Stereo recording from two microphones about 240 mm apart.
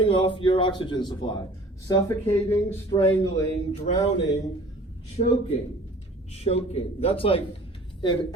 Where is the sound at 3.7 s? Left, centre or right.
Left.